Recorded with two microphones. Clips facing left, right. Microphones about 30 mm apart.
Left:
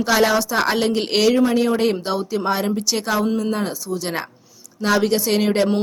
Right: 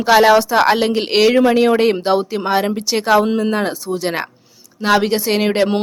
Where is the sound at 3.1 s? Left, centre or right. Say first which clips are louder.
Right 7 dB; right.